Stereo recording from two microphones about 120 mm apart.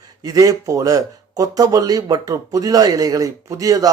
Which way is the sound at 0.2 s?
30° right (ahead or behind).